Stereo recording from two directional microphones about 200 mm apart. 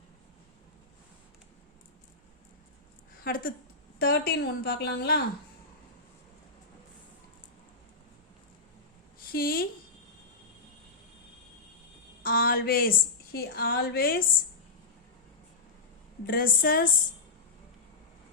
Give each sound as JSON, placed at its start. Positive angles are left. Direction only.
{"t": 3.2, "sound": "a woman's voice", "side_deg": 45}
{"t": 9.1, "sound": "a sound", "side_deg": 45}
{"t": 12.2, "sound": "a woman's voice", "side_deg": 45}
{"t": 16.2, "sound": "a woman's voice", "side_deg": 45}